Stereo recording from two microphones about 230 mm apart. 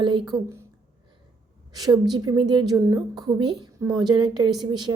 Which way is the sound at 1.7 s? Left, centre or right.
Centre.